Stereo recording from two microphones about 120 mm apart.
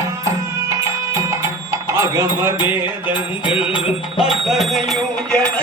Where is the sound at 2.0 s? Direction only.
25° right (ahead or behind).